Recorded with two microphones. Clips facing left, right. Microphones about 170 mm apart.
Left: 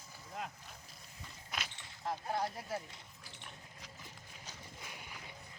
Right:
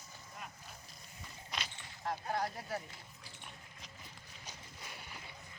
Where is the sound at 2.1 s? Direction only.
Centre (ahead or behind).